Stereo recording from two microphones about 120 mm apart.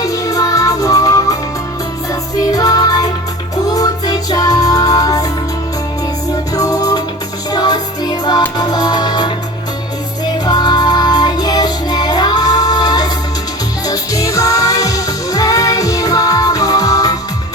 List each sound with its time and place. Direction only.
0.0 s music: 30° left (ahead or behind)
2.4 s music: 30° left (ahead or behind)
6.5 s music: 30° left (ahead or behind)
10.4 s music: 35° left (ahead or behind)